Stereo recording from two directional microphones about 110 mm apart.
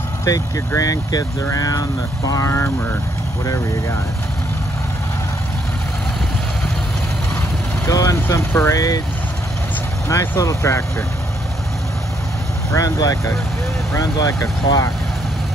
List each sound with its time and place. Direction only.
0.3 s speech: 30° left (ahead or behind)
7.8 s speech: 30° left (ahead or behind)
10.0 s speech: 30° left (ahead or behind)
12.7 s speech: 30° left (ahead or behind)